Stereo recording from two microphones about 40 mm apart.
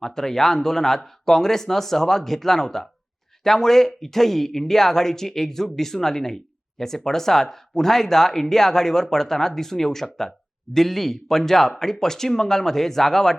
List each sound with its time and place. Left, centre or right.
0.0 s speech: centre